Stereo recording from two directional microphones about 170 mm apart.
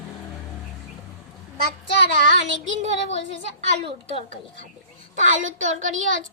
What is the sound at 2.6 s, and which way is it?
A woman's voice, 45° right (ahead or behind).